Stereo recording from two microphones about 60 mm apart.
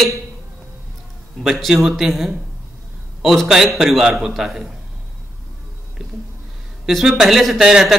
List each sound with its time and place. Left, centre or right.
1.4 s a man's voice: centre
6.9 s a man's voice: centre